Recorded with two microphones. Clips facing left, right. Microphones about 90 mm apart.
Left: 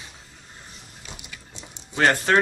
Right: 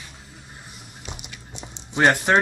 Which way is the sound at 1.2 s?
20° right (ahead or behind).